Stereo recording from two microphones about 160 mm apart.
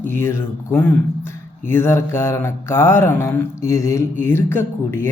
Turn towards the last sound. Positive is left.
turn(degrees=15)  # may be behind; listen again after turning